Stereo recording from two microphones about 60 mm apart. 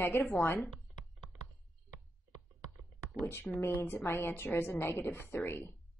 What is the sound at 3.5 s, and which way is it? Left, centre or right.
A woman's voice, left.